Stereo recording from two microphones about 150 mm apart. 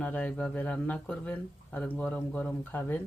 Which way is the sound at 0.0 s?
10° left (ahead or behind).